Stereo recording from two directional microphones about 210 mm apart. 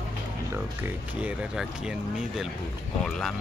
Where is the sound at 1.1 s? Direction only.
5° right (ahead or behind).